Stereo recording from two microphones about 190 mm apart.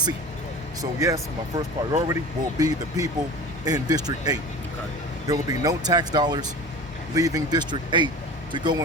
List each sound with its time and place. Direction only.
0.8 s speech: 15° right (ahead or behind)